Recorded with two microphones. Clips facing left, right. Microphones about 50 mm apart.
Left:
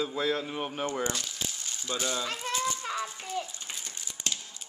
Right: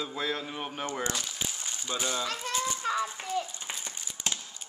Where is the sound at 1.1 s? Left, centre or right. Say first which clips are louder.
Right 1 dB; centre.